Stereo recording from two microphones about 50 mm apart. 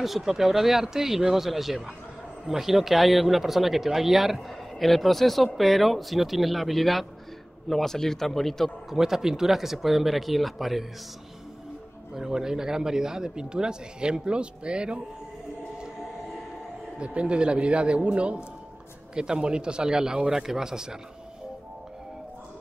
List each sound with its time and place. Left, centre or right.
0.0 s a man's voice: centre
8.9 s speech: centre
12.1 s speech: centre
17.0 s a man's voice: right